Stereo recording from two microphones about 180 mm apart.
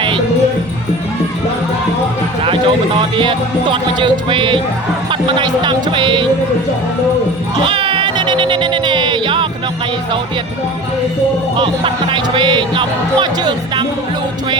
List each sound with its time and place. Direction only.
2.4 s speech: 30° right (ahead or behind)
7.6 s speech: 30° right (ahead or behind)
11.5 s speech: 30° right (ahead or behind)